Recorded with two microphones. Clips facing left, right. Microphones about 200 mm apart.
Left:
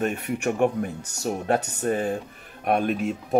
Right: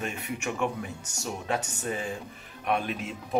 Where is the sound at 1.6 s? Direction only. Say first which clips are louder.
Left 7 dB; 55° left (ahead or behind).